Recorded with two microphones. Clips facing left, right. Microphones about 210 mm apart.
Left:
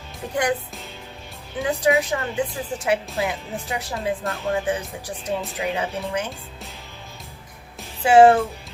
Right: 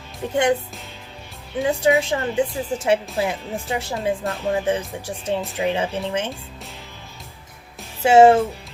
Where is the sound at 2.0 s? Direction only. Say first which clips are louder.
Right 3 dB; 25° right (ahead or behind).